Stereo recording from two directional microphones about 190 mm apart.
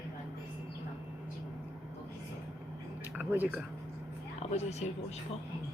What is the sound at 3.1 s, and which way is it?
Speech, 10° right (ahead or behind).